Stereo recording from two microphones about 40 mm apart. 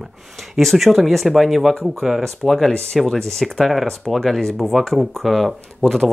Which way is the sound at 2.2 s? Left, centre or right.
Centre.